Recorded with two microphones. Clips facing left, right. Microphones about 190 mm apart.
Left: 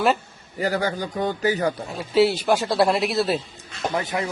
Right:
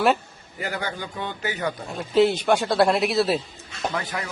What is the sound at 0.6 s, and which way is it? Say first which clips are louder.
Speech: left 6 dB; 40° left (ahead or behind).